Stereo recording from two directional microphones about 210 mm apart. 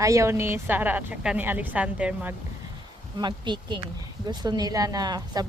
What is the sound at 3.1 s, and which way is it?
A woman's voice, 20° right (ahead or behind).